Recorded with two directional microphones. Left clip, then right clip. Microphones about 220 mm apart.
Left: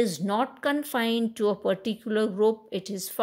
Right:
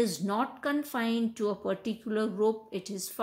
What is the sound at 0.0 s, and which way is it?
Speech, 35° left (ahead or behind).